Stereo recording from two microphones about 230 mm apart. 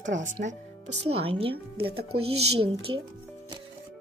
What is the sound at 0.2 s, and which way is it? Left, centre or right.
Speech, right.